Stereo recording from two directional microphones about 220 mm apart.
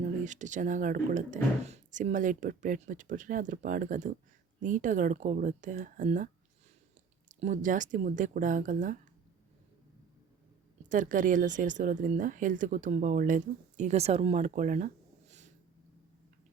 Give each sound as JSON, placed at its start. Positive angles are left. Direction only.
{"t": 0.0, "sound": "speech", "side_deg": -35}
{"t": 10.8, "sound": "speech", "side_deg": -35}
{"t": 15.3, "sound": "a sound", "side_deg": -30}